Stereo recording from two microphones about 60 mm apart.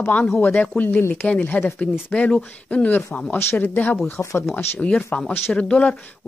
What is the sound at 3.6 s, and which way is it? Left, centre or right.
Speech, left.